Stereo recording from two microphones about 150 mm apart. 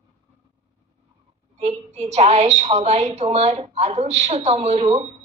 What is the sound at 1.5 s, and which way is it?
A man's voice, 45° right (ahead or behind).